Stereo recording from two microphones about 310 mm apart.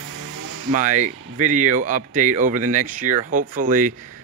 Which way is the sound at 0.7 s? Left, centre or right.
Right.